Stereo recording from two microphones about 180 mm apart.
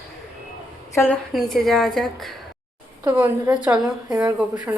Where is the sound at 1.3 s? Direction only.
Centre (ahead or behind).